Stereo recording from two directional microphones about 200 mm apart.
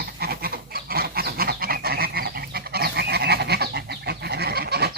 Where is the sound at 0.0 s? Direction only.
50° right (ahead or behind).